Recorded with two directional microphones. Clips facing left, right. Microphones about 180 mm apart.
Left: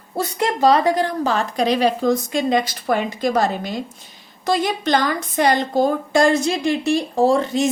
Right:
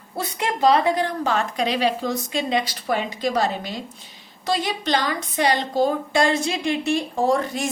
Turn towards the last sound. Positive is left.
turn(degrees=25)  # may be behind; listen again after turning